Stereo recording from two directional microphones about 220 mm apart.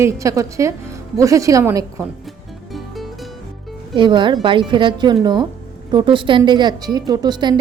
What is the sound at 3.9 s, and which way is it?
A woman's voice, 20° right (ahead or behind).